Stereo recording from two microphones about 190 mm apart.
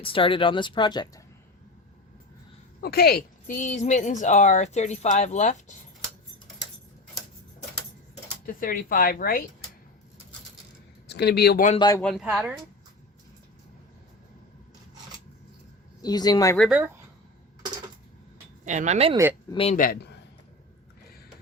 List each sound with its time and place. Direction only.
0.0 s speech: 30° left (ahead or behind)
2.8 s speech: 55° left (ahead or behind); by 5.7 s 40° left (ahead or behind)
8.4 s speech: 50° left (ahead or behind)
11.1 s speech: 60° left (ahead or behind)
11.8 s speech: 20° left (ahead or behind)
12.0 s speech: centre (ahead or behind)
16.0 s speech: 20° left (ahead or behind)
16.6 s speech: 5° right (ahead or behind)
18.6 s speech: 40° right (ahead or behind)
19.1 s speech: 15° right (ahead or behind)
19.5 s speech: 30° left (ahead or behind)
19.7 s speech: 45° left (ahead or behind)